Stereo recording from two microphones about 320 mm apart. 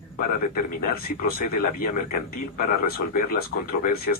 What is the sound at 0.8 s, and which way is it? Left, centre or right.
Speech, left.